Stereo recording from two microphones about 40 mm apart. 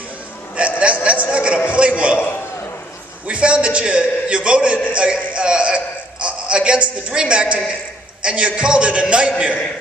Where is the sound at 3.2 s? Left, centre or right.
Right.